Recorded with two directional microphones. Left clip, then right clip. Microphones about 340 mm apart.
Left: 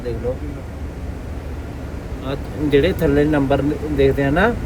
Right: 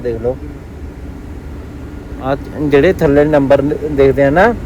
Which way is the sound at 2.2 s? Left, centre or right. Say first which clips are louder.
Right 7 dB; centre.